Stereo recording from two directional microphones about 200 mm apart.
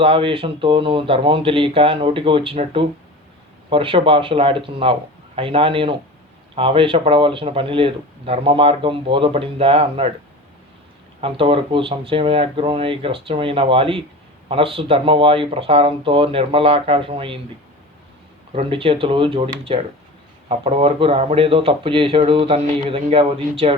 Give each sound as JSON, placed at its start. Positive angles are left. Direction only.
{"t": 0.0, "sound": "speech", "side_deg": -25}
{"t": 11.2, "sound": "speech", "side_deg": -25}
{"t": 18.5, "sound": "speech", "side_deg": -25}